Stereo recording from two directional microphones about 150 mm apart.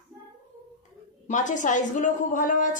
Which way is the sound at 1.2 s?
55° left (ahead or behind).